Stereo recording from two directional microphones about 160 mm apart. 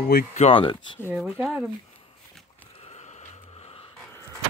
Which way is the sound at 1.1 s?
Centre (ahead or behind).